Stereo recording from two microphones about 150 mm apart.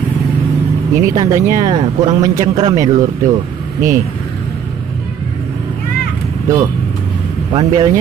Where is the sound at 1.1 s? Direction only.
20° right (ahead or behind).